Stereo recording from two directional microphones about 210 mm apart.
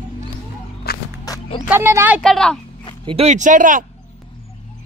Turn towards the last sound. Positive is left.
turn(degrees=-40)  # may be behind; listen again after turning